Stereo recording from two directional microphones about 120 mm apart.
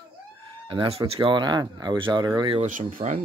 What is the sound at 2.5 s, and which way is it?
Speech, 90° right.